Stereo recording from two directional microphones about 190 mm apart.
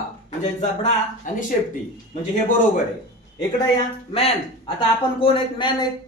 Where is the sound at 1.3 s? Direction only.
45° left (ahead or behind).